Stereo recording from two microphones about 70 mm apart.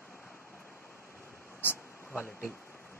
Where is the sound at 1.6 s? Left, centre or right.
Left.